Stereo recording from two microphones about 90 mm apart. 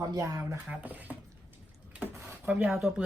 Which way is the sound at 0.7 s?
20° right (ahead or behind).